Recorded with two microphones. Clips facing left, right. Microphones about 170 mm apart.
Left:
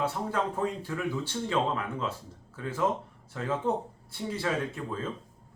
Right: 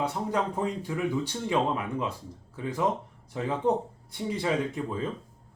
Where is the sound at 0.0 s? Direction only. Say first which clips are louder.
Right 1 dB; 15° right (ahead or behind).